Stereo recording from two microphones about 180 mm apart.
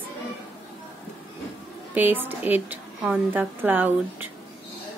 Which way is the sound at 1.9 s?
10° right (ahead or behind).